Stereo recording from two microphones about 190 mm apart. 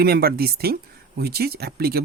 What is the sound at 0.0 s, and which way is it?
Speech, 55° right (ahead or behind).